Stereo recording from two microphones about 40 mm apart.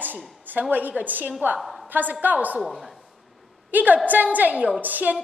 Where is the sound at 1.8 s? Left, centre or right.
Right.